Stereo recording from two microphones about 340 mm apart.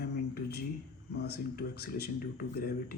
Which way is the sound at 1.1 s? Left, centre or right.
Left.